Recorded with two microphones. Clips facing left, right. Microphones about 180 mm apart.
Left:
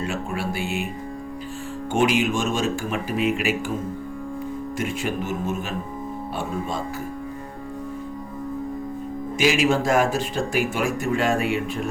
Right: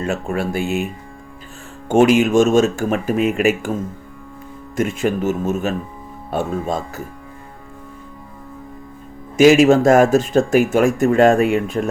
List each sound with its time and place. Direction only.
0.0 s speech: 45° right (ahead or behind)
1.9 s speech: 45° right (ahead or behind)
4.8 s speech: 45° right (ahead or behind)
9.4 s speech: 45° right (ahead or behind)